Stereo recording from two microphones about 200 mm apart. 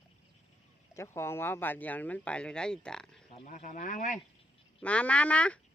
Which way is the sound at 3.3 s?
35° left (ahead or behind).